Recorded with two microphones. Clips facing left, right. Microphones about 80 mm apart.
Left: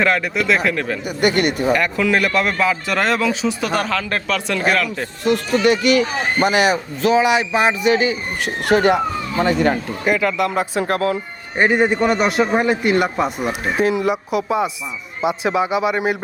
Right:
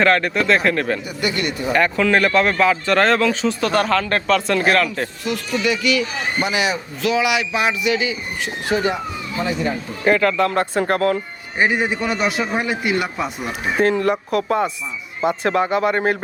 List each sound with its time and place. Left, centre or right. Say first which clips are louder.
0.0 s speech: right 1 dB; centre
1.0 s speech: left 5 dB; left
1.7 s speech: right 5 dB; centre
5.2 s speech: left 7 dB; left
8.4 s speech: left 6 dB; left
10.0 s speech: right 4 dB; centre
11.9 s speech: left 5 dB; left
12.5 s speech: left 4 dB; centre
13.0 s speech: left 5 dB; left
13.5 s speech: even; centre